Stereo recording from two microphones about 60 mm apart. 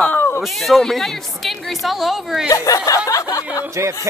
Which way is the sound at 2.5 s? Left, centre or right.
Left.